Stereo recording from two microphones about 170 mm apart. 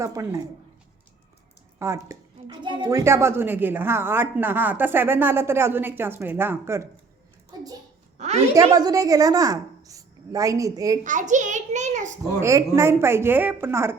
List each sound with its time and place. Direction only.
0.0 s speech: 20° right (ahead or behind)
2.0 s a woman's voice: 25° right (ahead or behind)
3.0 s a woman's voice: 15° right (ahead or behind)
8.7 s a woman's voice: 20° right (ahead or behind)
11.0 s a child's voice: 50° right (ahead or behind)
12.4 s a woman's voice: 15° right (ahead or behind)